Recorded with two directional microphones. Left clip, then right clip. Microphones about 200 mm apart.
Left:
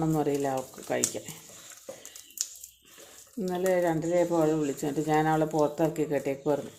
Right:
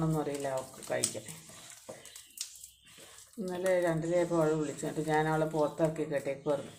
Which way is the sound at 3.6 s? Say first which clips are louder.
Left 3 dB; 45° left (ahead or behind).